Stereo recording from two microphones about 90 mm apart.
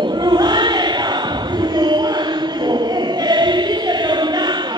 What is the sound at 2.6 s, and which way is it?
Choir, 55° right (ahead or behind).